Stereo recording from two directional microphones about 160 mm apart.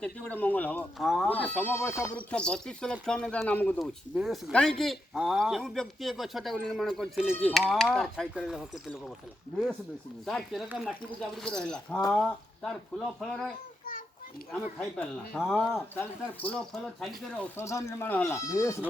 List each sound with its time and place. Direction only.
0.0 s speech: 10° left (ahead or behind)
0.9 s speech: centre (ahead or behind)
3.8 s speech: centre (ahead or behind)
10.2 s speech: centre (ahead or behind)
13.8 s children playing: 65° left (ahead or behind)
14.5 s speech: 10° left (ahead or behind)
15.4 s speech: 5° right (ahead or behind)
16.0 s speech: 10° left (ahead or behind)